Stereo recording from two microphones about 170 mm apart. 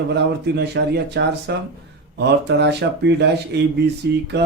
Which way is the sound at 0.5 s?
75° right (ahead or behind).